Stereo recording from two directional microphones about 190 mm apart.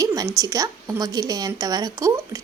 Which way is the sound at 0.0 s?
20° right (ahead or behind).